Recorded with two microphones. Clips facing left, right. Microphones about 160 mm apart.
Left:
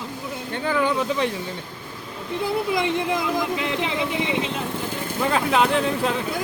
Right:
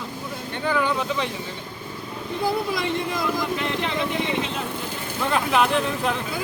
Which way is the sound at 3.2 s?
15° left (ahead or behind).